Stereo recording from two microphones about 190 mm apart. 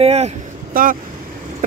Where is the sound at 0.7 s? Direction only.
50° right (ahead or behind).